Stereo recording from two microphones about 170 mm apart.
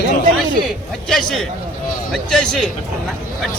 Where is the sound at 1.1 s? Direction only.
Centre (ahead or behind).